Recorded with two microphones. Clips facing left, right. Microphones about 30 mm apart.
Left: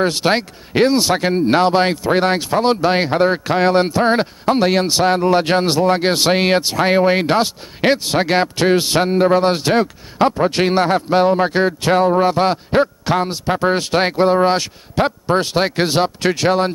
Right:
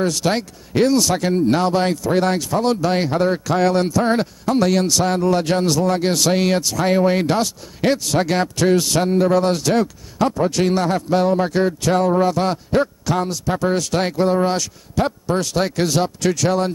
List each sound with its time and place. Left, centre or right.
0.0 s speech: left